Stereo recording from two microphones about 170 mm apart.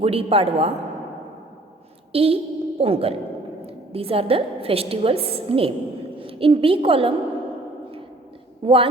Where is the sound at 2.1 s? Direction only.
35° right (ahead or behind).